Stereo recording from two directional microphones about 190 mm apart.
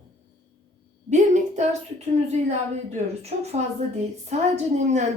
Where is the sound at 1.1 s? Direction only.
40° right (ahead or behind).